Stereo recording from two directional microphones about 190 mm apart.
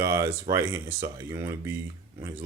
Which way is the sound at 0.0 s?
15° right (ahead or behind).